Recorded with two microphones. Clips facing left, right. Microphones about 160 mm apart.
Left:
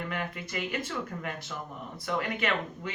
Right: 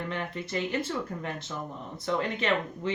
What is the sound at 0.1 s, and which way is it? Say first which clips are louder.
A woman's voice: right 2 dB; 30° right (ahead or behind).